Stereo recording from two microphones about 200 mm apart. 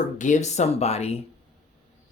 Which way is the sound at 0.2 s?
35° left (ahead or behind).